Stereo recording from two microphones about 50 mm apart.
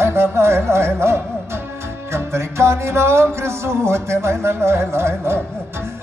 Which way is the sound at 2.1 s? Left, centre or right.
Right.